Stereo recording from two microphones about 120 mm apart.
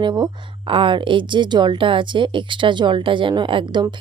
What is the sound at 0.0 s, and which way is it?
A woman's voice, 40° right (ahead or behind).